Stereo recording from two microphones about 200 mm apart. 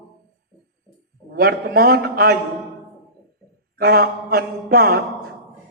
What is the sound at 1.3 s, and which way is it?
Mantra, 50° right (ahead or behind).